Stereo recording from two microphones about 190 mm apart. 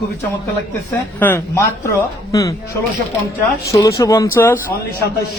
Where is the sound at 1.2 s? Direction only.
10° left (ahead or behind).